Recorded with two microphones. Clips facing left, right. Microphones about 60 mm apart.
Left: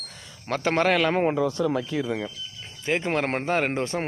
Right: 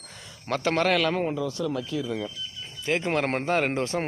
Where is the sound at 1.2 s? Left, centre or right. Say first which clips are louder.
Left 5 dB; left.